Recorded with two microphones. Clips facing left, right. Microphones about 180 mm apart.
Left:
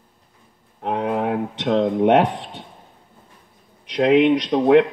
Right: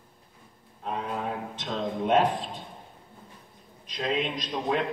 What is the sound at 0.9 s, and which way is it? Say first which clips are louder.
Speech: left 10 dB; 70° left (ahead or behind).